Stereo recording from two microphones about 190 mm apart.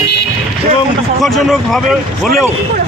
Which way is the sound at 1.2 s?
Centre (ahead or behind).